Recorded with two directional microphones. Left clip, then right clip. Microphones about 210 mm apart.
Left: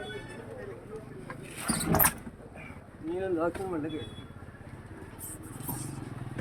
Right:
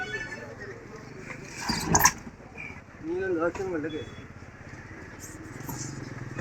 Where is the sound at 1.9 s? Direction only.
35° left (ahead or behind).